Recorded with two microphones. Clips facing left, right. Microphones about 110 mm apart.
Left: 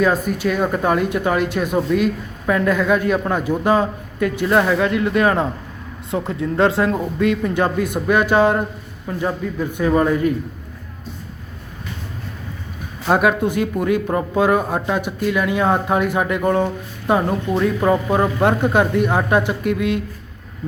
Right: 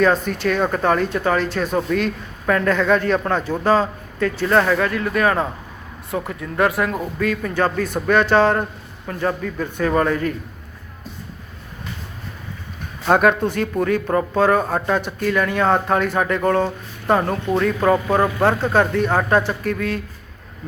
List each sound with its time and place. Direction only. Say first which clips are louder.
0.0 s a man's voice: even; 10° left (ahead or behind)
13.1 s speech: right 1 dB; 5° left (ahead or behind)